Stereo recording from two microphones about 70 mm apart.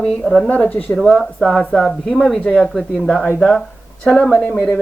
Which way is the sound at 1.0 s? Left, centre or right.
Centre.